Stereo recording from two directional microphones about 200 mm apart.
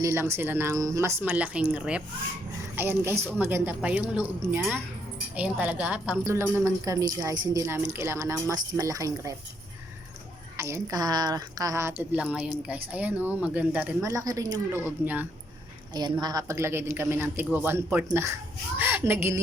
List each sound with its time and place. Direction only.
0.0 s speech: 15° right (ahead or behind)
10.6 s speech: 15° right (ahead or behind)